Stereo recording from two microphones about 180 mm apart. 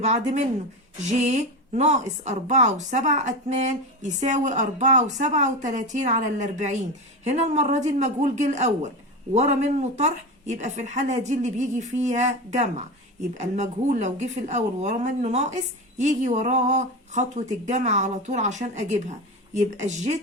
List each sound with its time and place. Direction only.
0.0 s speech: 40° right (ahead or behind)